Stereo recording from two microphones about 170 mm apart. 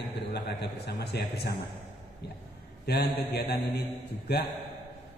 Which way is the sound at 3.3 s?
65° left (ahead or behind).